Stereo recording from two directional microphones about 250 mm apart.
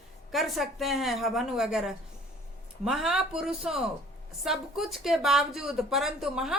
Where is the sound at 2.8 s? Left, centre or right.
Centre.